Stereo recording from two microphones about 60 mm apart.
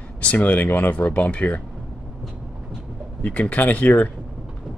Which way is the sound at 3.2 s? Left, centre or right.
Left.